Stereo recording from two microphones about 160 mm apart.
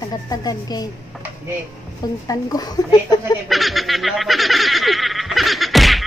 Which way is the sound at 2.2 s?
25° left (ahead or behind).